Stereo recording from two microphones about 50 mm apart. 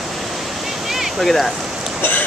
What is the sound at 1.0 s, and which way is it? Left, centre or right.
Speech, centre.